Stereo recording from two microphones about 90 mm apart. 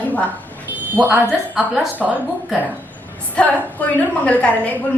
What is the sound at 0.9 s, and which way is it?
Speech, 20° right (ahead or behind).